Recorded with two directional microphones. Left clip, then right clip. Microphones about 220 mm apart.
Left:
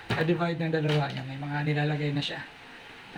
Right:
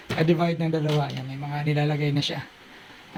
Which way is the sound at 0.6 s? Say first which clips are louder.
Right 2 dB; 15° right (ahead or behind).